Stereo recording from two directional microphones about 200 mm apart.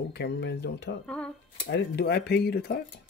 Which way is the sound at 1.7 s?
55° left (ahead or behind).